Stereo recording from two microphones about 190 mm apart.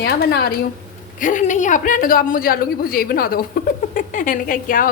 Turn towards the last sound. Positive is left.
turn(degrees=45)  # may be behind; listen again after turning